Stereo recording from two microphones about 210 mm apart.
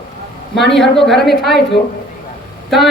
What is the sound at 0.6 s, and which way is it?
A woman's voice, centre (ahead or behind).